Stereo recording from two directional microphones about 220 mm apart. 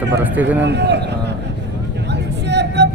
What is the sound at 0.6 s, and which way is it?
Speech, 50° right (ahead or behind).